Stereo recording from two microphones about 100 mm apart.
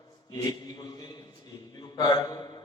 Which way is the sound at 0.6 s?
40° left (ahead or behind).